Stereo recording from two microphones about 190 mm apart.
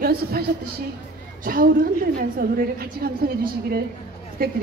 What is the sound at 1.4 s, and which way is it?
A woman's voice, 50° right (ahead or behind).